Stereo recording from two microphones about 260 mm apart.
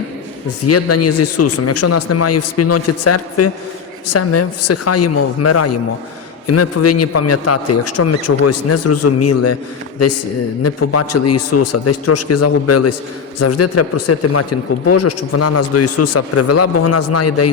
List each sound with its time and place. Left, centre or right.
0.7 s a man's voice: left